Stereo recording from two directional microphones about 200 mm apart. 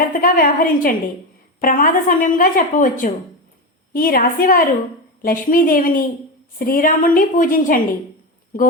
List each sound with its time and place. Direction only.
0.1 s a woman's voice: 45° left (ahead or behind)